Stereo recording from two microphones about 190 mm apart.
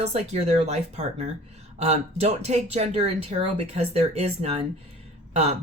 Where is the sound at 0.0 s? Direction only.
35° right (ahead or behind).